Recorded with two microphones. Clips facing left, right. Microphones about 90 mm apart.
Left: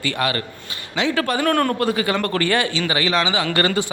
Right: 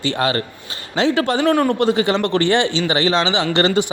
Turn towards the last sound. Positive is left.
turn(degrees=-20)  # may be behind; listen again after turning